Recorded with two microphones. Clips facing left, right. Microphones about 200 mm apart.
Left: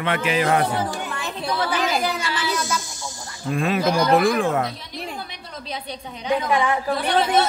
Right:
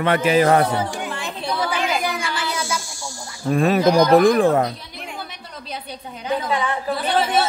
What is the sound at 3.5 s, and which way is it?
Speech, 40° right (ahead or behind).